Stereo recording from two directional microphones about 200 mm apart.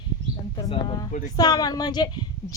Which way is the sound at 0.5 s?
25° left (ahead or behind).